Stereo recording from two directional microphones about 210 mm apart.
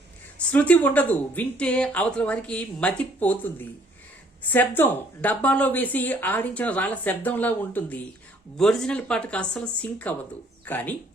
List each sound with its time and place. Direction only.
0.3 s speech: 5° left (ahead or behind)